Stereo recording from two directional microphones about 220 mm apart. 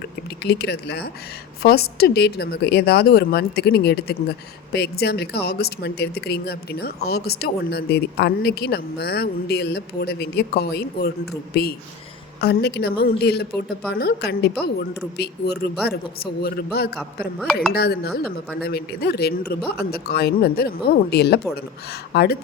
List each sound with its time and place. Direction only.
0.4 s speech: 45° left (ahead or behind)
17.0 s a woman's voice: centre (ahead or behind)
17.7 s speech: 45° left (ahead or behind)